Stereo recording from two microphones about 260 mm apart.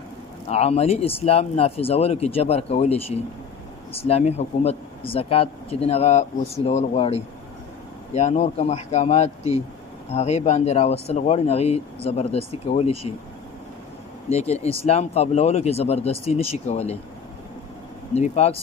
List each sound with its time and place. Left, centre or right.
0.5 s speech: left
14.3 s speech: left
18.1 s speech: left